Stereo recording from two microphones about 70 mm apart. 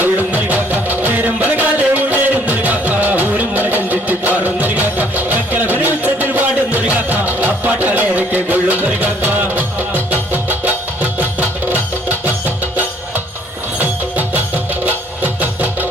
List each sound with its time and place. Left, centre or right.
0.0 s music: right
13.7 s music: right